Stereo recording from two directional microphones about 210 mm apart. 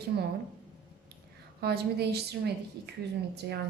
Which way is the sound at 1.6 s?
50° right (ahead or behind).